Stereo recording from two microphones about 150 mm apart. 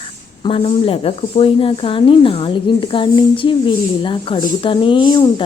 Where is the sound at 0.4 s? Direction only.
40° left (ahead or behind).